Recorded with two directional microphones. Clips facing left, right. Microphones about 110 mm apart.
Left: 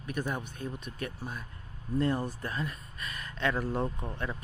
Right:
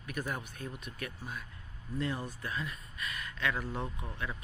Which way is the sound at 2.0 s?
40° left (ahead or behind).